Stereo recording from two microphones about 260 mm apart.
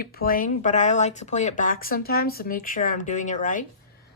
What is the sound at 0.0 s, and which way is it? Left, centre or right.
Speech, left.